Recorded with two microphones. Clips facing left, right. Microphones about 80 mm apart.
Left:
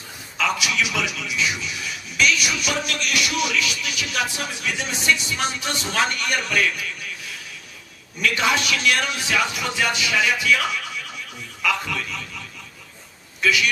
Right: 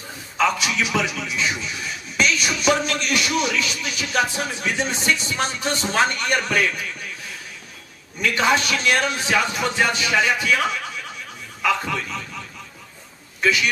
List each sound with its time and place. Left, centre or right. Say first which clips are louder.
0.4 s a man's voice: right 2 dB; right
2.1 s music: even; right
8.2 s a man's voice: right 2 dB; right
11.6 s a man's voice: right 2 dB; right